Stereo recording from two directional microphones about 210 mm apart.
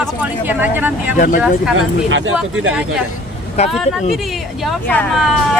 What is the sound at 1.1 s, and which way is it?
Speech, 40° left (ahead or behind).